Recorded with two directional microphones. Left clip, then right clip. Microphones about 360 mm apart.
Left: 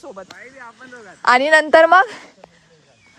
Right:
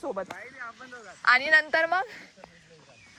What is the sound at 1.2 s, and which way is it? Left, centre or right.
A woman's voice, centre.